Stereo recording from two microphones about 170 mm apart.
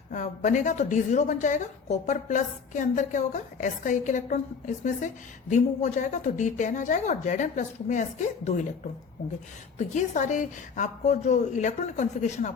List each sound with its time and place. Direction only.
0.1 s a woman's voice: 45° left (ahead or behind)
9.7 s a woman's voice: 45° left (ahead or behind)